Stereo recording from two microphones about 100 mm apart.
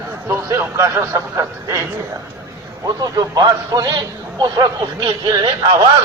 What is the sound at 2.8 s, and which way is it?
A man's voice, 40° right (ahead or behind).